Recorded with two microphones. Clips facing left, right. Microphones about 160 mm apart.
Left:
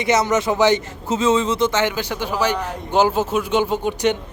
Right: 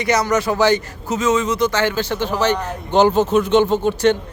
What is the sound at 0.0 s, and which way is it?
A man's voice, 20° left (ahead or behind).